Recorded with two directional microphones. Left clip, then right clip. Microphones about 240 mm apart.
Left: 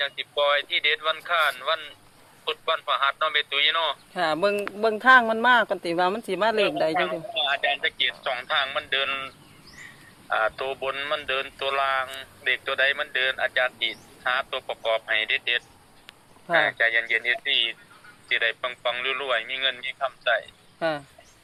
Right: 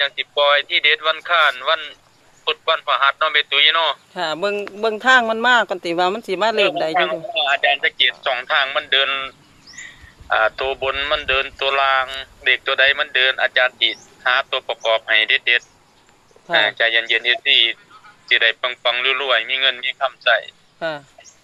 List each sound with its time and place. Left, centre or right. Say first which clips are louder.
0.0 s speech: right 7 dB; right
4.1 s speech: right 2 dB; centre
20.7 s speech: right 2 dB; centre